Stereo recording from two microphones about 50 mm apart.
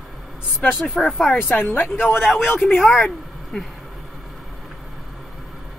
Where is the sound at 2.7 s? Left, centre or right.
Left.